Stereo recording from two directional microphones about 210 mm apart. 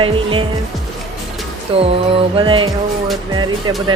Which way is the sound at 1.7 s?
25° right (ahead or behind).